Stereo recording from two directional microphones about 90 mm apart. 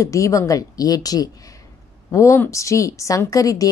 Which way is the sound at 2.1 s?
35° left (ahead or behind).